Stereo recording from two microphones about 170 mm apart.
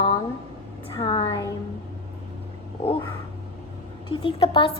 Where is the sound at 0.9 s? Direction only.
35° left (ahead or behind).